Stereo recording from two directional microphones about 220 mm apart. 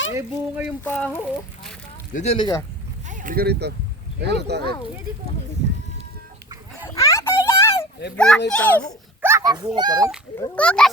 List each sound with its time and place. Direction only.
0.1 s speech: 10° right (ahead or behind)
0.9 s speech: 5° left (ahead or behind)
2.1 s speech: 25° left (ahead or behind)
3.1 s speech: 35° right (ahead or behind)
6.8 s a sound: 15° left (ahead or behind)
8.1 s a child's voice: 5° left (ahead or behind)
9.2 s a child's voice: 15° right (ahead or behind)
10.3 s a child's voice: 10° left (ahead or behind)